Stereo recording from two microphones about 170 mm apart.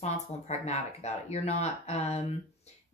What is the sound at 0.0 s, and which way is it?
A woman's voice, 40° left (ahead or behind).